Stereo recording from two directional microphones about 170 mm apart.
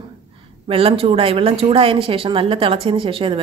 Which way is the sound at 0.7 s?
35° right (ahead or behind).